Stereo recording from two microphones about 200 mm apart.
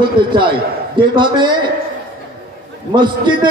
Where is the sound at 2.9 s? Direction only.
25° right (ahead or behind).